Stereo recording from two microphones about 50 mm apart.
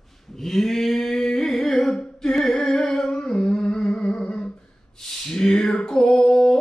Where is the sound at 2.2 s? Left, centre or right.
Centre.